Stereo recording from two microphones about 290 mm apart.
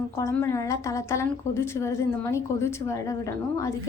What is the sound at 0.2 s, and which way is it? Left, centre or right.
A woman's voice, centre.